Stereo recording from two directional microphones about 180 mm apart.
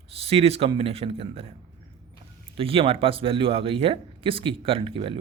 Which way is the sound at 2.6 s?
30° right (ahead or behind).